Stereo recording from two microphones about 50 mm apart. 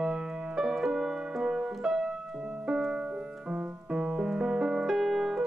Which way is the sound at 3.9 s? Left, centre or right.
Centre.